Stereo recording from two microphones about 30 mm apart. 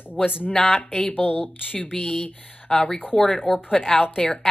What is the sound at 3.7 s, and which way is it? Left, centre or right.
Speech, left.